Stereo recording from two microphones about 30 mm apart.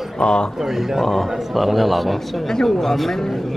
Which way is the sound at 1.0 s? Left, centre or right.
Centre.